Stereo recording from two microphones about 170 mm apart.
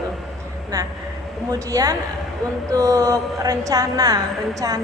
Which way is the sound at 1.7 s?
20° right (ahead or behind).